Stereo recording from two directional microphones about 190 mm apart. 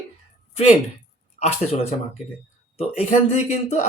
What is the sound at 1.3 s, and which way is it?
Speech, 35° left (ahead or behind).